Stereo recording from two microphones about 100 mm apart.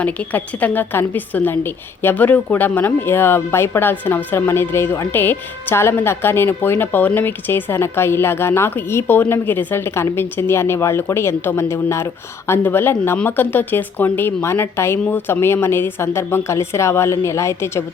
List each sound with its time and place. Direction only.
0.0 s a woman's voice: 15° left (ahead or behind)